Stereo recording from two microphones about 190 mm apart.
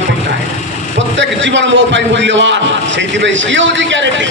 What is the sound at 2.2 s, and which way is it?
Speech, 70° right (ahead or behind).